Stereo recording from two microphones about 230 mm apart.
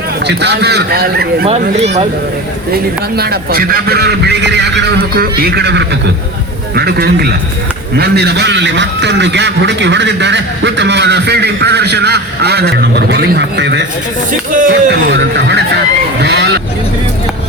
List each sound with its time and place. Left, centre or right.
0.3 s a man's voice: right
1.8 s speech: right
3.2 s a man's voice: right
16.2 s a sound: right